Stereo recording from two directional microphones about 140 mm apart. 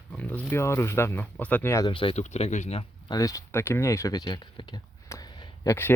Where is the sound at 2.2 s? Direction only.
55° left (ahead or behind).